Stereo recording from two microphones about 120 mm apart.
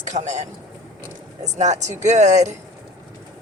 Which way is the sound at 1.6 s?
70° right (ahead or behind).